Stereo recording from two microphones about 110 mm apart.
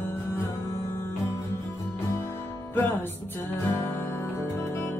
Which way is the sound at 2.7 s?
20° left (ahead or behind).